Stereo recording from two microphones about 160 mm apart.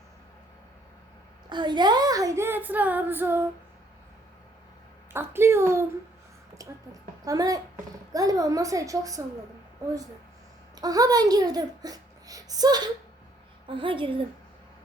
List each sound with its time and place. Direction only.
1.5 s speech: 30° right (ahead or behind); by 3.5 s 15° right (ahead or behind)
5.1 s a woman's voice: 15° right (ahead or behind)
6.6 s chicken: 20° right (ahead or behind)
7.3 s a woman's voice: 20° right (ahead or behind)
10.8 s a woman's voice: 25° right (ahead or behind)